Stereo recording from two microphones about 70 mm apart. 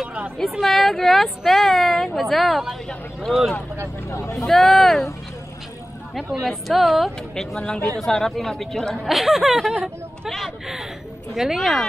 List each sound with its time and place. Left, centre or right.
0.4 s a woman's voice: centre
4.1 s speech: left
4.5 s a woman's voice: centre
6.1 s a woman's voice: centre